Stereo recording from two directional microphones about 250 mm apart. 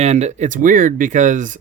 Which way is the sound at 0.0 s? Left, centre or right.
Right.